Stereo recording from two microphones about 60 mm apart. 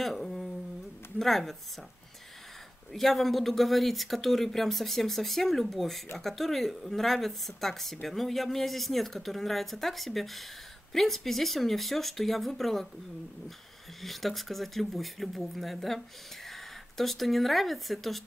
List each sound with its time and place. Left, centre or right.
0.0 s humming: centre
1.2 s speech: centre
2.9 s speech: centre
14.0 s speech: centre